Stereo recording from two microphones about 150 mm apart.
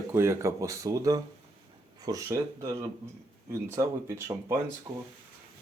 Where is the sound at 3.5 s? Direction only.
20° right (ahead or behind).